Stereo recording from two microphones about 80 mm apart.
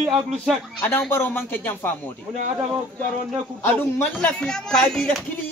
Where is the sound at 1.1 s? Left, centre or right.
Left.